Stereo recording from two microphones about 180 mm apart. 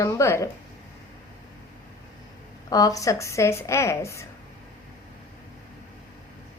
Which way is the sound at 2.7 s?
20° left (ahead or behind).